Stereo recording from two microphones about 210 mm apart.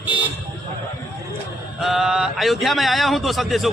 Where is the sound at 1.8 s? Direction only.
Centre (ahead or behind).